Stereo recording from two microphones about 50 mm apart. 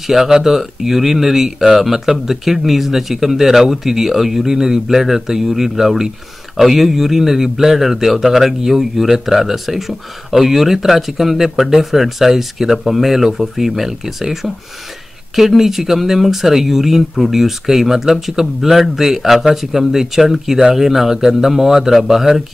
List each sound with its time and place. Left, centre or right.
0.0 s speech: centre